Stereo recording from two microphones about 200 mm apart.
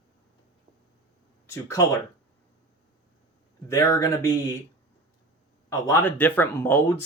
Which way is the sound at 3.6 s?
15° left (ahead or behind).